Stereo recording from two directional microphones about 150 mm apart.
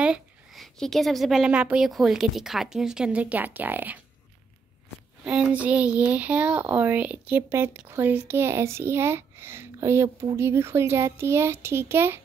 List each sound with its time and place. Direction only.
0.0 s a woman's voice: 5° right (ahead or behind)
5.2 s speech: 5° right (ahead or behind)